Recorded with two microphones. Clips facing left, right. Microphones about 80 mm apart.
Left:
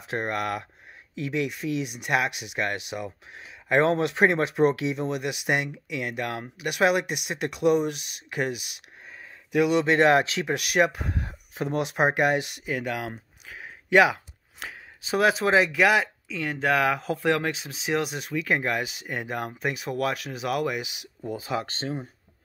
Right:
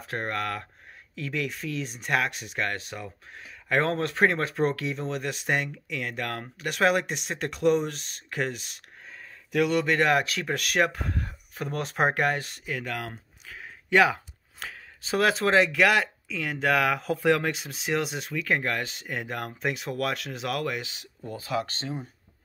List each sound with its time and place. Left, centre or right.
0.0 s speech: centre
9.8 s speech: left
10.4 s speech: centre
21.4 s speech: left